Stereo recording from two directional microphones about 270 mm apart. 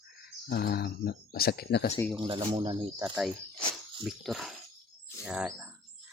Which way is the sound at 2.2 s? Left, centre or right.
Centre.